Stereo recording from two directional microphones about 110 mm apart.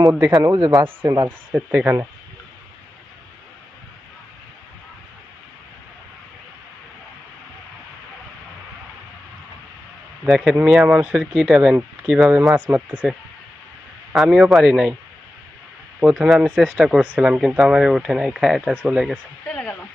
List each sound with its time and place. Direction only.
0.0 s a man's voice: 25° right (ahead or behind)
1.5 s speech: 15° right (ahead or behind)
10.2 s speech: centre (ahead or behind)
14.1 s speech: 5° right (ahead or behind)
16.0 s speech: 10° right (ahead or behind)
19.5 s speech: 10° left (ahead or behind)